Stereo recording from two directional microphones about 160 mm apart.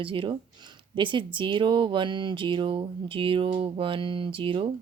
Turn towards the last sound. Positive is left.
turn(degrees=-35)  # may be behind; listen again after turning